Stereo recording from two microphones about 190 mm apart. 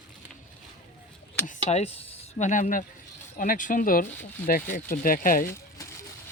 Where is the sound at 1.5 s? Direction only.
35° left (ahead or behind).